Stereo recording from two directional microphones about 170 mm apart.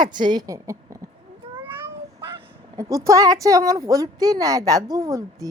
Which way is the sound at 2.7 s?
20° right (ahead or behind).